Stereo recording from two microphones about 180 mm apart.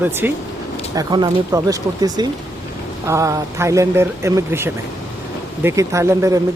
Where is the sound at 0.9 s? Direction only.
20° right (ahead or behind).